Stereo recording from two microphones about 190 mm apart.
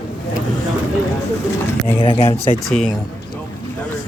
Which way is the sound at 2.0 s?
25° left (ahead or behind).